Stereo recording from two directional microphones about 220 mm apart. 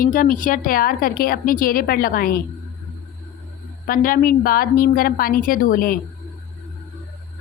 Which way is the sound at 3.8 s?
40° left (ahead or behind).